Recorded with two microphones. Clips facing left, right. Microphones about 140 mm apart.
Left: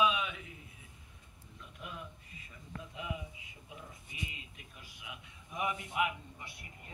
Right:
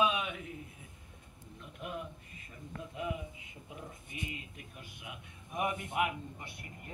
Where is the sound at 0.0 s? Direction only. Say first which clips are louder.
Even; 50° right (ahead or behind).